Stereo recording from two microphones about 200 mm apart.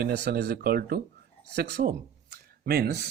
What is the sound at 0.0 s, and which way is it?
Speech, 50° right (ahead or behind).